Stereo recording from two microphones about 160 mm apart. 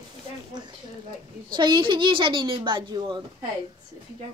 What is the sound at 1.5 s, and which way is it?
A woman's voice, 30° right (ahead or behind).